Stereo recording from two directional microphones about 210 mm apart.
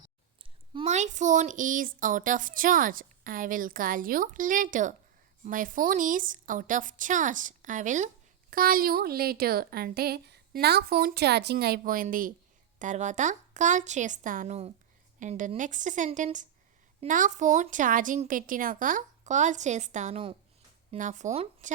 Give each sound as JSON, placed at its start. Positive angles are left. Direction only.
{"t": 0.7, "sound": "a woman's voice", "side_deg": -30}